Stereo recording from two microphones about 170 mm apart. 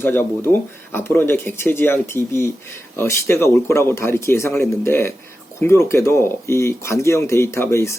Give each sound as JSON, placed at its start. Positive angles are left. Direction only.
{"t": 0.0, "sound": "speech", "side_deg": 10}